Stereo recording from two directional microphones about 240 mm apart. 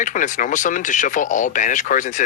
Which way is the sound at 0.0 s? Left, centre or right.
Left.